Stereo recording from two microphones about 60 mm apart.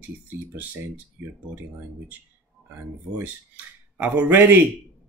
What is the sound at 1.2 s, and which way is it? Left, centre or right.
Speech, right.